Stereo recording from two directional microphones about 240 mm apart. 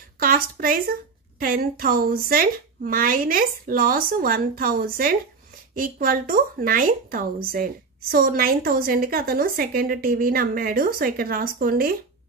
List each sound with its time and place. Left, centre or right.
0.2 s speech: right